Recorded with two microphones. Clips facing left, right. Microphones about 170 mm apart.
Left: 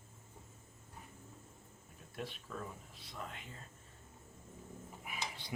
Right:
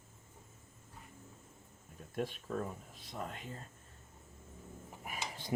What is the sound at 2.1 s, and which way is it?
Speech, 45° right (ahead or behind).